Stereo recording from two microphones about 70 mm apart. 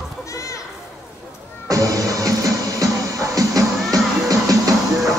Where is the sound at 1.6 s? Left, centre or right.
Right.